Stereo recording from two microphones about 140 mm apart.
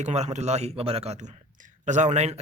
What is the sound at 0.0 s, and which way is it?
Speech, 55° right (ahead or behind).